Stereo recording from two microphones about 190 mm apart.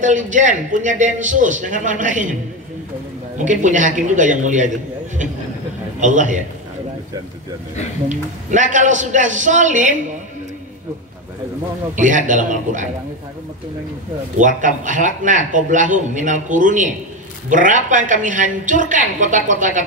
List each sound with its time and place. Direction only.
0.0 s a man's voice: 40° right (ahead or behind)
3.3 s a man's voice: 40° right (ahead or behind)
8.1 s a man's voice: 40° right (ahead or behind)
11.9 s a man's voice: 40° right (ahead or behind)
14.4 s a man's voice: 40° right (ahead or behind)